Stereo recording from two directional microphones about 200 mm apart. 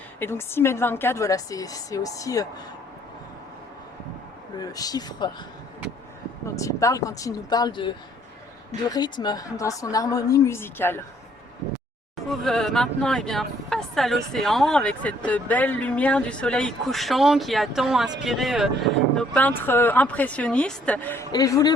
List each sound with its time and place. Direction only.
0.2 s speech: 10° left (ahead or behind)
4.5 s speech: 20° left (ahead or behind)
6.6 s speech: 15° left (ahead or behind)
12.3 s speech: centre (ahead or behind); by 21.7 s 20° left (ahead or behind)